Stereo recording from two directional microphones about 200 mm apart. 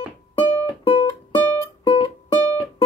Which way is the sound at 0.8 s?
25° left (ahead or behind).